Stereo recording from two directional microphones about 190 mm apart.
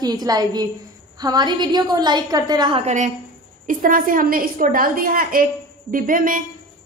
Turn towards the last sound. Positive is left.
turn(degrees=-45)  # may be behind; listen again after turning